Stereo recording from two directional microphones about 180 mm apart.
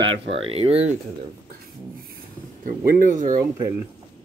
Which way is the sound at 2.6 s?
50° right (ahead or behind).